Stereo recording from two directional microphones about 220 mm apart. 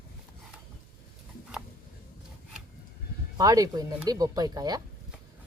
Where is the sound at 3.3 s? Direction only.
15° right (ahead or behind).